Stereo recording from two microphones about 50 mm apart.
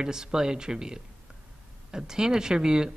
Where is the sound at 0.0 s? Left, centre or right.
Centre.